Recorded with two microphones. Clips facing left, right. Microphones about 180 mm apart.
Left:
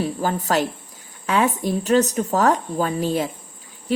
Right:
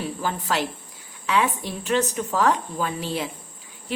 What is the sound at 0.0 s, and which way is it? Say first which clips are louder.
A woman's voice: left 5 dB; 40° left (ahead or behind).